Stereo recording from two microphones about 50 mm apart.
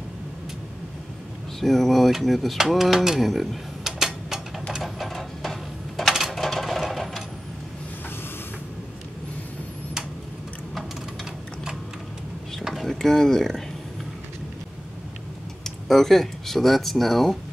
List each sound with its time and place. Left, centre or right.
1.6 s speech: centre
3.3 s a sound: centre
6.3 s sewing machine: centre
12.6 s vehicle: centre
12.9 s speech: centre
15.6 s speech: centre